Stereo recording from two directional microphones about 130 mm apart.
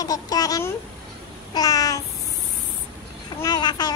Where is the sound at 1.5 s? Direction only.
30° left (ahead or behind).